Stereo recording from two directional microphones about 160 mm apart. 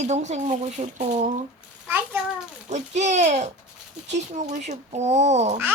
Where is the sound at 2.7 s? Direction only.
45° right (ahead or behind).